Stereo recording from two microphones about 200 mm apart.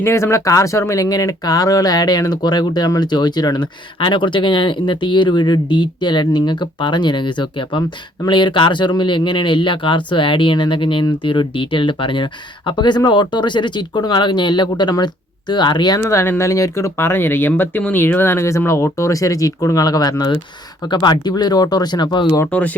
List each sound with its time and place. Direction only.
0.0 s speech: 15° left (ahead or behind)